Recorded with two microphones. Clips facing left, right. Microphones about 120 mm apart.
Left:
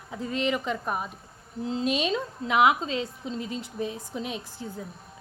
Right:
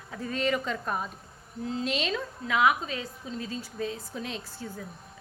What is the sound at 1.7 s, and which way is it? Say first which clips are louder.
A woman's voice: left 4 dB; 25° left (ahead or behind).